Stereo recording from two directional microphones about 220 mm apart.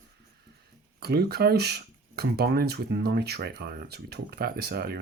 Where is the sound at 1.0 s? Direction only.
45° right (ahead or behind).